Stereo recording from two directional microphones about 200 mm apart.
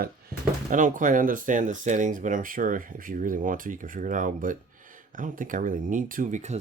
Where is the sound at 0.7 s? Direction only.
40° right (ahead or behind).